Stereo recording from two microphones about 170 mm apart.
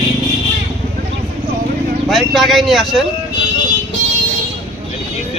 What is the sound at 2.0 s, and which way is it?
Speech, centre (ahead or behind).